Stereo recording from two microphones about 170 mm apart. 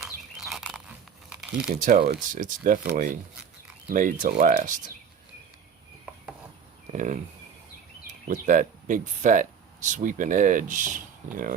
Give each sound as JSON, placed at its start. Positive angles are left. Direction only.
{"t": 0.5, "sound": "a sound", "side_deg": -5}
{"t": 1.3, "sound": "crumpling", "side_deg": -5}
{"t": 1.7, "sound": "speech", "side_deg": -45}
{"t": 2.0, "sound": "speech", "side_deg": -60}
{"t": 3.8, "sound": "speech", "side_deg": -50}
{"t": 6.9, "sound": "speech", "side_deg": -50}